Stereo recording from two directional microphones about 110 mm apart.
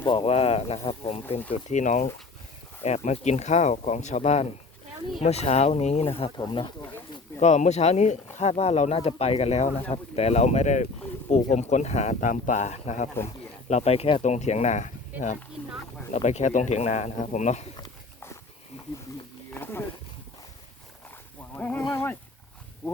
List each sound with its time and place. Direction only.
0.1 s speech: 60° left (ahead or behind)
0.9 s a sound: 65° left (ahead or behind)
1.5 s speech: 90° left
5.2 s speech: 75° left (ahead or behind); by 6.3 s 60° left (ahead or behind)
6.3 s speech: 45° left (ahead or behind)
7.3 s speech: 90° left
19.5 s a sound: 20° left (ahead or behind)
21.5 s speech: 15° left (ahead or behind)